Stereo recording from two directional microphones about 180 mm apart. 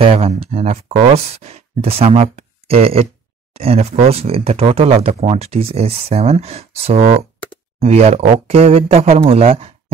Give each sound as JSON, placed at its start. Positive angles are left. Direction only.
{"t": 0.0, "sound": "speech", "side_deg": -30}